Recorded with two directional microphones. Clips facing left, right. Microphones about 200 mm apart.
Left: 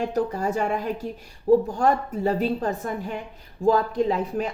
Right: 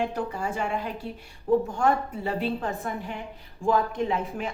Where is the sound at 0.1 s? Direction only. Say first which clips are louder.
Left 6 dB; 40° left (ahead or behind).